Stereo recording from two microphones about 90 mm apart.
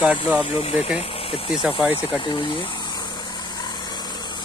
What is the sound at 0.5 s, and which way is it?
Speech, 90° left.